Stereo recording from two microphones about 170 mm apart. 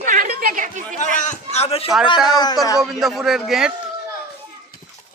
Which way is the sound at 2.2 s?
25° left (ahead or behind).